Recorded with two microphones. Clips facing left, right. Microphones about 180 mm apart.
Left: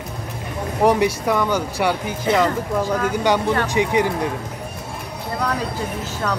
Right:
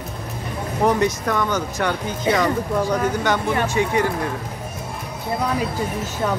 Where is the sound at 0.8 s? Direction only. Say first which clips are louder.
Left 2 dB; 10° left (ahead or behind).